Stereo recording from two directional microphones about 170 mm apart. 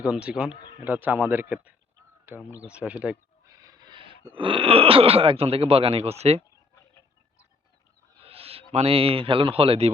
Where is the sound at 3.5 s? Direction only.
20° right (ahead or behind).